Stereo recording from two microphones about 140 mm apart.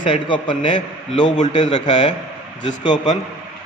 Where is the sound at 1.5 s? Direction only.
35° left (ahead or behind).